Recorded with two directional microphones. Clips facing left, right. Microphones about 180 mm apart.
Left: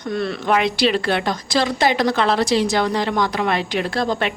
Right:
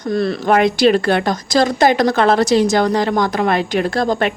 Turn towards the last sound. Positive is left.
turn(degrees=-45)  # may be behind; listen again after turning